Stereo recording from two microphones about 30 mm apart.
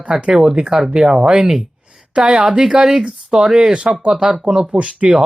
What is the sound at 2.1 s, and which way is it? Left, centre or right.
Speech, right.